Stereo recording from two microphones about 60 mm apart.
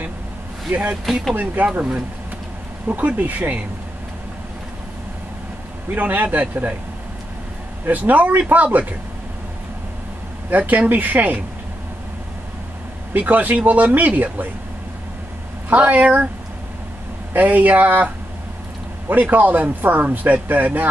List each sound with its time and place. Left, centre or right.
0.7 s speech: right
5.9 s speech: right
7.8 s speech: right
10.5 s speech: right
13.1 s speech: right
15.7 s speech: right
17.3 s speech: right
19.3 s speech: right